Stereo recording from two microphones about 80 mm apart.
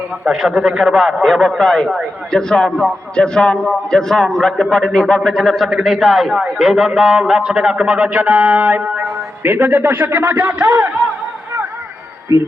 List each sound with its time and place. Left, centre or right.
0.3 s a man's voice: centre
12.3 s a man's voice: right